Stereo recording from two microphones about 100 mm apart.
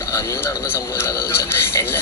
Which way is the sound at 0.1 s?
25° left (ahead or behind).